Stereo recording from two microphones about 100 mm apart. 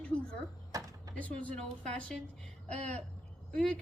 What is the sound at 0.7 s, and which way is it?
Speech, 35° right (ahead or behind).